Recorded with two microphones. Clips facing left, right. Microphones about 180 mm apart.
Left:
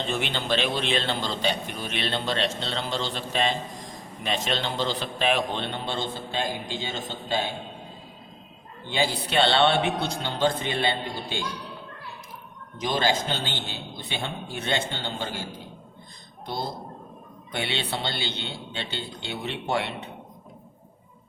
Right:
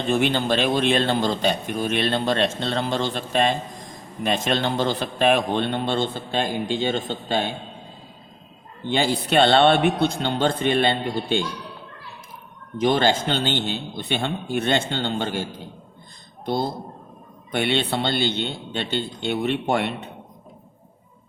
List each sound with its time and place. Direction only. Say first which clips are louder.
0.1 s a man's voice: right 9 dB; 45° right (ahead or behind)
8.9 s speech: right 5 dB; 55° right (ahead or behind)
12.8 s speech: right 6 dB; 60° right (ahead or behind)
17.5 s speech: right 7 dB; 55° right (ahead or behind)